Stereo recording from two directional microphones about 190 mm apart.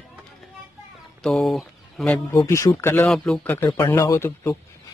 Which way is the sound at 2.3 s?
15° left (ahead or behind).